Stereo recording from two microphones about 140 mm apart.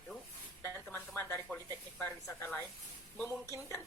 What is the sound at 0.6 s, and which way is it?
Speech, 15° left (ahead or behind).